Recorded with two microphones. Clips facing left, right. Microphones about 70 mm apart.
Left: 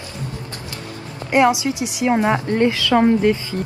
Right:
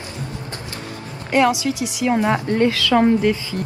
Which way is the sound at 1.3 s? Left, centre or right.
Left.